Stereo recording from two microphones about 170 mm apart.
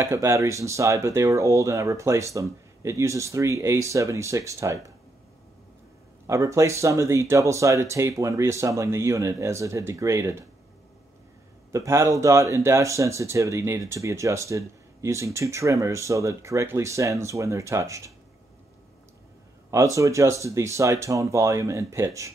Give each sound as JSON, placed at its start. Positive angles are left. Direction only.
{"t": 0.0, "sound": "speech", "side_deg": -15}
{"t": 6.2, "sound": "speech", "side_deg": -15}
{"t": 11.7, "sound": "speech", "side_deg": -15}
{"t": 19.7, "sound": "speech", "side_deg": -20}